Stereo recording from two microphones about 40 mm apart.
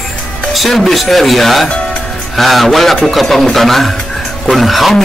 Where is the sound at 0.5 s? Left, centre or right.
Centre.